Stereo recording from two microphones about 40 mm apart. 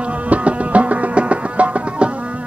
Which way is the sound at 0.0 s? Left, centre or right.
Right.